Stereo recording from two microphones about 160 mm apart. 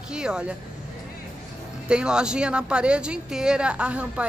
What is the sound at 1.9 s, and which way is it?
A woman's voice, 5° right (ahead or behind).